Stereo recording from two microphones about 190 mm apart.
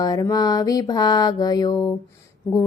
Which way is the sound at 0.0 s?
20° left (ahead or behind).